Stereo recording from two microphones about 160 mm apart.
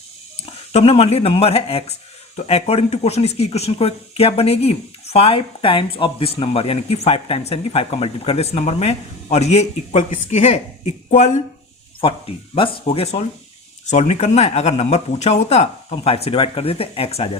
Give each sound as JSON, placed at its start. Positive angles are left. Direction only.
{"t": 0.7, "sound": "speech", "side_deg": 40}
{"t": 12.8, "sound": "speech", "side_deg": 40}